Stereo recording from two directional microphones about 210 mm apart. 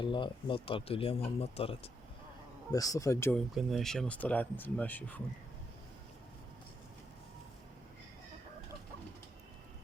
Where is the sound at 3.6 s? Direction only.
Centre (ahead or behind).